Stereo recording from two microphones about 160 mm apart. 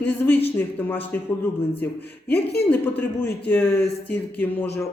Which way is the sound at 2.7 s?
10° left (ahead or behind).